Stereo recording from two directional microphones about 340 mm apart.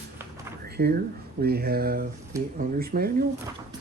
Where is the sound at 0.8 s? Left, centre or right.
Right.